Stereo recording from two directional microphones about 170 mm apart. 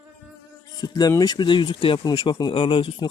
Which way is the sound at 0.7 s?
25° left (ahead or behind).